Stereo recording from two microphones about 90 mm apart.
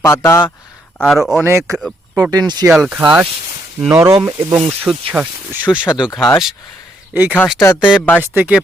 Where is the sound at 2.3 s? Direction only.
50° right (ahead or behind).